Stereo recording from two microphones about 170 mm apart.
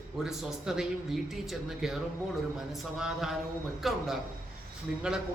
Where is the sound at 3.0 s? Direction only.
Centre (ahead or behind).